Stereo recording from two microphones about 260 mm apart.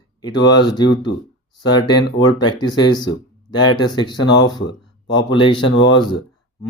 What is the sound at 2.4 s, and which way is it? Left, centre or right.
Speech, centre.